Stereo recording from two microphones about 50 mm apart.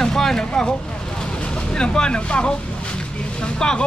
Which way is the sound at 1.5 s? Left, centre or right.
Centre.